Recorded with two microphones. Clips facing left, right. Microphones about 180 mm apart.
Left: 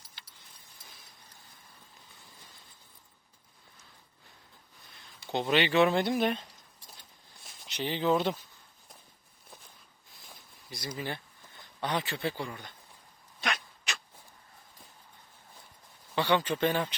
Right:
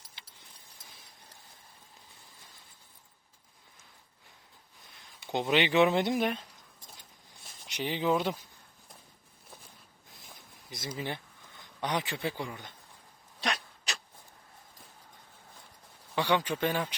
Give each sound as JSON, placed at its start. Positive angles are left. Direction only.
{"t": 5.3, "sound": "speech", "side_deg": -15}
{"t": 6.2, "sound": "a sound", "side_deg": -5}
{"t": 7.7, "sound": "speech", "side_deg": -15}
{"t": 10.7, "sound": "speech", "side_deg": -25}
{"t": 16.1, "sound": "speech", "side_deg": -10}